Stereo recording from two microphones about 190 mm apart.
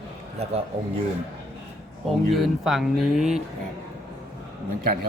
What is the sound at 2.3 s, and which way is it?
A man's voice, centre (ahead or behind).